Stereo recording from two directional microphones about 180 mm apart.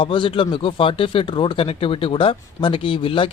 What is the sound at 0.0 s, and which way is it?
Speech, 30° left (ahead or behind).